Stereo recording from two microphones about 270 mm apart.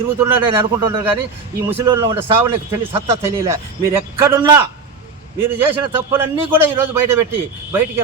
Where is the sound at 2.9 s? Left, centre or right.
Right.